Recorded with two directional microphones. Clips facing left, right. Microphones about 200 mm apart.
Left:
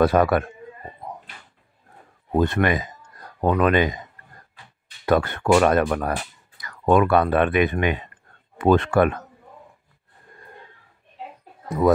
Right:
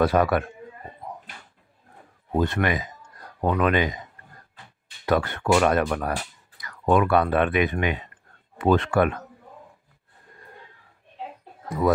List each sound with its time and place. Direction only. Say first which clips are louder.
0.0 s speech: left 3 dB; 50° left (ahead or behind)
2.3 s speech: left 3 dB; 50° left (ahead or behind)
5.0 s speech: left 3 dB; 50° left (ahead or behind)